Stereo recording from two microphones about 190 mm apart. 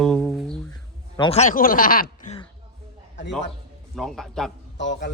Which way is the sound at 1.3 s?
40° left (ahead or behind).